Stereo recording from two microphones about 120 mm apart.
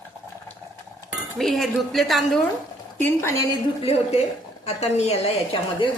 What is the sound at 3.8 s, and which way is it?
A woman's voice, 55° left (ahead or behind).